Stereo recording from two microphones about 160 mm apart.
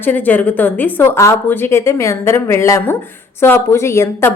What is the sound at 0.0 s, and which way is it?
A woman's voice, 10° left (ahead or behind).